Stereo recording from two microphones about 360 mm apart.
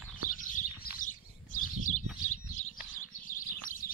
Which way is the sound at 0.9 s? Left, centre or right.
Left.